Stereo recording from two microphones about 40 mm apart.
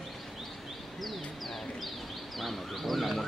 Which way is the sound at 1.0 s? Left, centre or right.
Centre.